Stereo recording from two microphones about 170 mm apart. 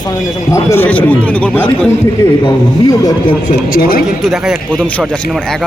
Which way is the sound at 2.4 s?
20° left (ahead or behind).